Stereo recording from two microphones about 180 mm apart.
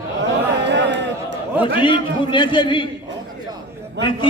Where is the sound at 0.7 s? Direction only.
75° right (ahead or behind).